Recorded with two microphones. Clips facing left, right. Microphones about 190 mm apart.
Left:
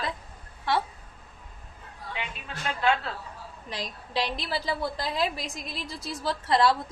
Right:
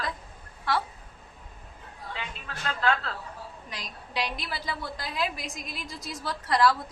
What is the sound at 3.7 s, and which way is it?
A woman's voice, 30° left (ahead or behind).